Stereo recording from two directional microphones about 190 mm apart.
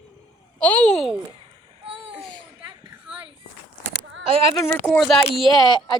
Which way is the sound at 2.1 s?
Centre (ahead or behind).